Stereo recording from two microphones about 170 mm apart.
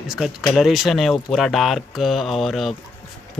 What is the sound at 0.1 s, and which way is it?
Speech, centre (ahead or behind).